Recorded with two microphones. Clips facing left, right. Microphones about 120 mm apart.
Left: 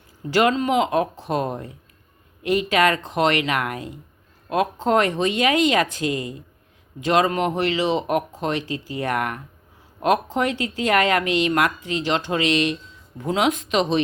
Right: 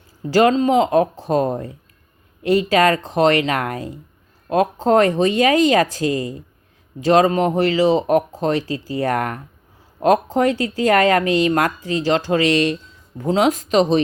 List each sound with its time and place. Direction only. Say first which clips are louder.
0.3 s speech: right 4 dB; 35° right (ahead or behind)